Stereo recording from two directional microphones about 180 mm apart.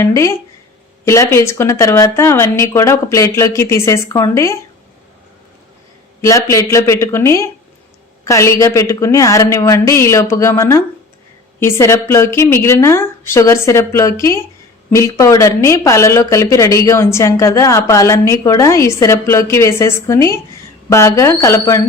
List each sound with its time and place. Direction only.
0.0 s speech: 15° left (ahead or behind)
6.2 s speech: 15° left (ahead or behind)